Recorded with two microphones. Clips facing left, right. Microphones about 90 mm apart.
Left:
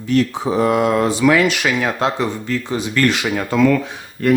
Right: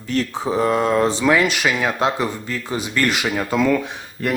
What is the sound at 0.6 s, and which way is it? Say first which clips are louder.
Mantra: left 3 dB; 65° left (ahead or behind).